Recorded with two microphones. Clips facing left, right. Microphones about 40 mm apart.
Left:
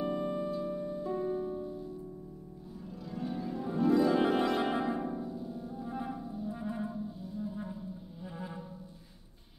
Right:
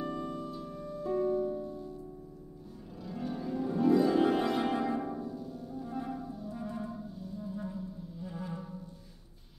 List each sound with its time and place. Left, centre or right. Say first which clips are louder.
0.0 s music: left 4 dB; left
3.0 s music: even; centre
3.3 s harp: right 3 dB; centre
4.2 s music: even; centre
4.6 s music: right 1 dB; left